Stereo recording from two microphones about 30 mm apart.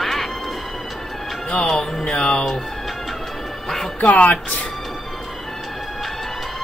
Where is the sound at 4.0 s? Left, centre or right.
Left.